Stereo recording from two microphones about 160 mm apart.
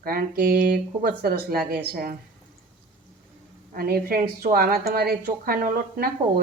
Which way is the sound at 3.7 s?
70° right (ahead or behind).